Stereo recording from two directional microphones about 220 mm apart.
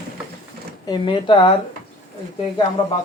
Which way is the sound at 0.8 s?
20° left (ahead or behind).